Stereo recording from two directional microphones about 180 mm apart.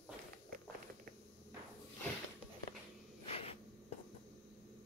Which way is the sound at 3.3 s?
35° left (ahead or behind).